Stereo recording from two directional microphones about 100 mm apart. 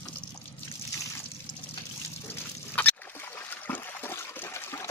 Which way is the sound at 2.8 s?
15° left (ahead or behind).